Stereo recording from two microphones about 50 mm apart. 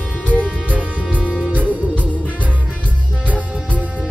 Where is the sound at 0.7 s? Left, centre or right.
Right.